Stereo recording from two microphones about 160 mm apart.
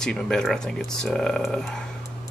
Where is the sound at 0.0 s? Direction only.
5° left (ahead or behind).